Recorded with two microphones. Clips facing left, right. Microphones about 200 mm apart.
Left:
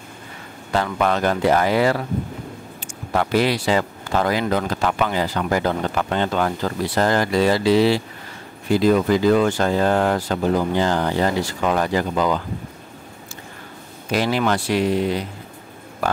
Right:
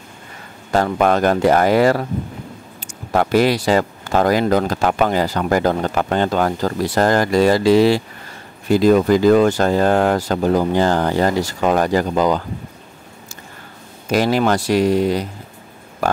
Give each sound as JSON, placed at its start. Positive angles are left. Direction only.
{"t": 0.7, "sound": "speech", "side_deg": -45}
{"t": 3.1, "sound": "speech", "side_deg": -45}
{"t": 14.1, "sound": "speech", "side_deg": -45}